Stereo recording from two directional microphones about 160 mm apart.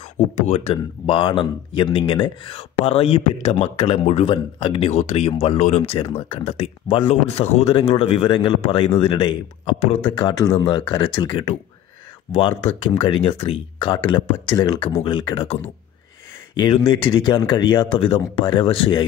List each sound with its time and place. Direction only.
0.4 s speech: 40° left (ahead or behind)
5.9 s speech: 30° left (ahead or behind)
10.1 s speech: 25° left (ahead or behind)
12.3 s speech: 35° left (ahead or behind)